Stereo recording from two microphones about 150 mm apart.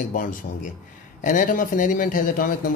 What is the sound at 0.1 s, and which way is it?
A man's voice, 65° left (ahead or behind).